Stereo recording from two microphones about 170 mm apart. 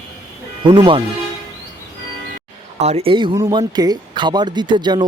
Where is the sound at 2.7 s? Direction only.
40° right (ahead or behind).